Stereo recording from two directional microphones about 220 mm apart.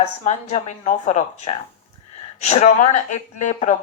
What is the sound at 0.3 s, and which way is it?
Speech, 30° left (ahead or behind).